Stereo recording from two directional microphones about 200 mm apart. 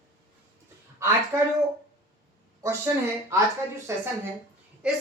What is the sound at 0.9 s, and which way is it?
Speech, 15° right (ahead or behind).